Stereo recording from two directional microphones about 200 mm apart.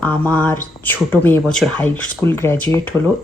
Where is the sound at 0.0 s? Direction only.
10° left (ahead or behind).